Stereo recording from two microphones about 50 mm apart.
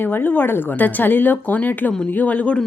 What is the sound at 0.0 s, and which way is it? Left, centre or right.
Speech, left.